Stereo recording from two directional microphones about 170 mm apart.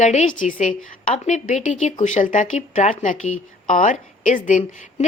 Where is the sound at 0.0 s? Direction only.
45° left (ahead or behind).